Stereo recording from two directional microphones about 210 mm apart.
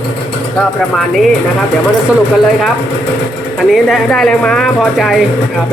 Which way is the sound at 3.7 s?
Centre (ahead or behind).